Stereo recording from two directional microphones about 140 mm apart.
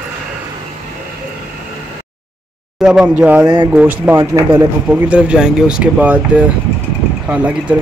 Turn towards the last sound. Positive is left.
turn(degrees=-10)  # may be behind; listen again after turning